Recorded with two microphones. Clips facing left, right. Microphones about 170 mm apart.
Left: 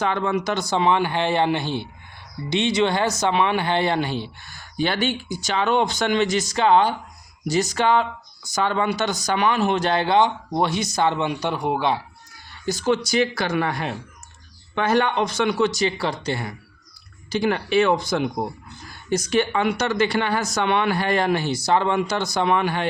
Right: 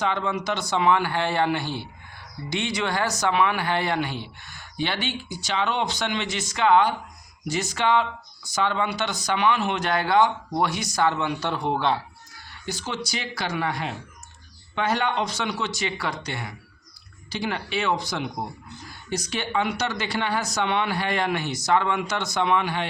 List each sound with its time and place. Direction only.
0.0 s speech: 50° left (ahead or behind); by 11.9 s 15° left (ahead or behind)
12.6 s speech: 45° left (ahead or behind); by 16.5 s 30° left (ahead or behind)
17.3 s speech: 50° left (ahead or behind)